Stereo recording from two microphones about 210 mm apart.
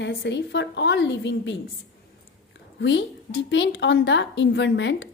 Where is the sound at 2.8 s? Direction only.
60° left (ahead or behind).